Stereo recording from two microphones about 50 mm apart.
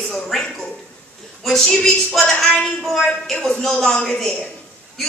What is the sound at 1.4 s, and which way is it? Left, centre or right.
A woman's voice, centre.